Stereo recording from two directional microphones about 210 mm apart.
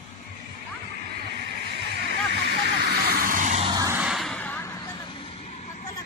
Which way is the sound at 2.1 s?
55° right (ahead or behind).